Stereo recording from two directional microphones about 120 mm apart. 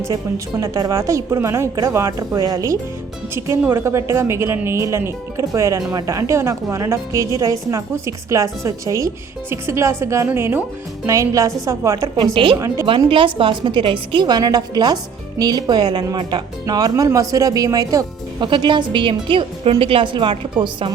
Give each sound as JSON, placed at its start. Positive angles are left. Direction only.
{"t": 0.6, "sound": "a woman's voice", "side_deg": -30}
{"t": 3.3, "sound": "a woman's voice", "side_deg": -20}
{"t": 12.9, "sound": "a woman's voice", "side_deg": -45}